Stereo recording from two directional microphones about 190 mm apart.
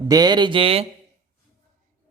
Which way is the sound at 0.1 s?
20° right (ahead or behind).